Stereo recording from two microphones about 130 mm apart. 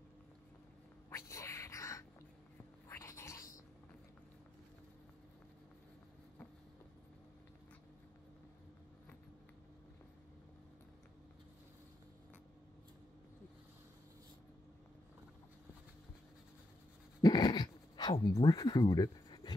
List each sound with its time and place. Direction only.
1.1 s cat: 20° left (ahead or behind)
2.9 s a sound: 20° left (ahead or behind)
17.2 s dog: 30° left (ahead or behind)
18.2 s speech: 30° left (ahead or behind)